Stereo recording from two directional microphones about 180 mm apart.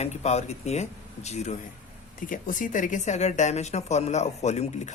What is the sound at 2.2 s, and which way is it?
Speech, 50° left (ahead or behind).